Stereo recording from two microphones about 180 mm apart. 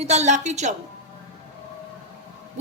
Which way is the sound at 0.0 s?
40° right (ahead or behind).